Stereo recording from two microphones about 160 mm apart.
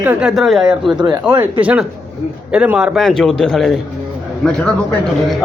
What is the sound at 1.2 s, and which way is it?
A man's voice, 10° right (ahead or behind).